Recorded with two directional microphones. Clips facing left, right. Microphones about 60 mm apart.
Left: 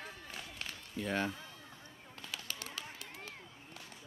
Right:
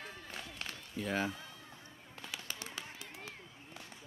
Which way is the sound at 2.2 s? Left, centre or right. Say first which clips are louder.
Even; centre.